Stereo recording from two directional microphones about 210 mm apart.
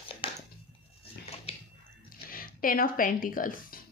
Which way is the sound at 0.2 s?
25° left (ahead or behind).